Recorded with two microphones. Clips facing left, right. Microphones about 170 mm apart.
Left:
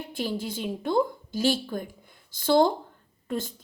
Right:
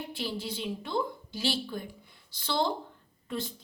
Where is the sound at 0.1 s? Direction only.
45° left (ahead or behind).